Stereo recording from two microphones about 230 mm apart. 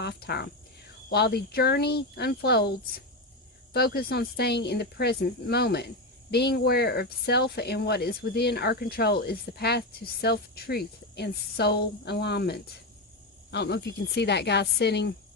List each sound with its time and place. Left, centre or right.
0.0 s speech: left